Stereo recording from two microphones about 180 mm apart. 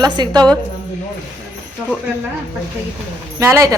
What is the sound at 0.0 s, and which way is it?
Speech, 25° right (ahead or behind).